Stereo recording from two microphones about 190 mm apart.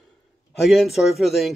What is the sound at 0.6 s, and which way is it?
Speech, centre (ahead or behind).